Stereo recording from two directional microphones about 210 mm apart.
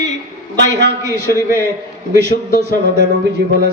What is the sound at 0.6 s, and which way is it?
Speech, 55° right (ahead or behind).